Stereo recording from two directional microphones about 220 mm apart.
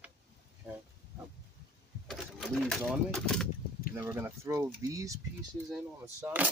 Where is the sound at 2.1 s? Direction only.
Centre (ahead or behind).